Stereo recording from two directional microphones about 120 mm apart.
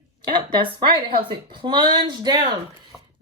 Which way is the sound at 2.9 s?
10° right (ahead or behind).